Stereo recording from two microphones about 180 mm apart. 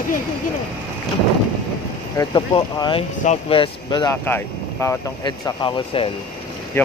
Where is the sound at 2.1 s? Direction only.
25° left (ahead or behind).